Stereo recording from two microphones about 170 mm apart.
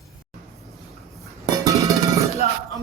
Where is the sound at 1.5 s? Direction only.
20° right (ahead or behind).